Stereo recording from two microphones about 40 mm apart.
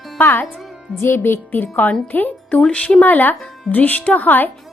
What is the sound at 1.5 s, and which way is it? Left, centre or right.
Speech, left.